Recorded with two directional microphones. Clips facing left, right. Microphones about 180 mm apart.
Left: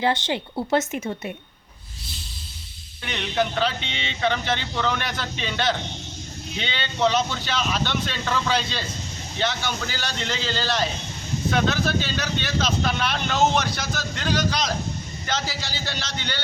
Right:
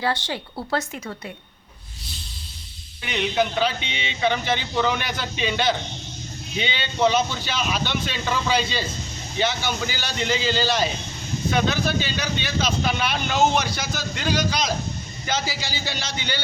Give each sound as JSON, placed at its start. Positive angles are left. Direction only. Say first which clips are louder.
{"t": 0.0, "sound": "speech", "louder": "left 3 dB", "side_deg": 20}
{"t": 3.0, "sound": "speech", "louder": "right 2 dB", "side_deg": -5}